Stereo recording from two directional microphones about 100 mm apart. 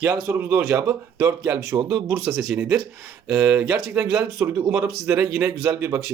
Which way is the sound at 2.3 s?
Centre (ahead or behind).